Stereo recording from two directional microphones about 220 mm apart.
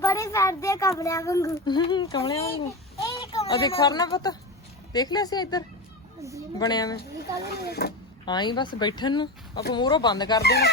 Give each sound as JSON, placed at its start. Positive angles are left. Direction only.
{"t": 0.0, "sound": "a child's voice", "side_deg": 15}
{"t": 7.6, "sound": "speech", "side_deg": 45}
{"t": 8.2, "sound": "speech", "side_deg": 20}
{"t": 10.4, "sound": "speech", "side_deg": 45}